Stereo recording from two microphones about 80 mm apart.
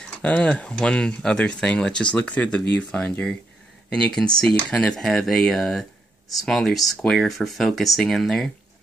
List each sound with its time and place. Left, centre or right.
0.1 s speech: centre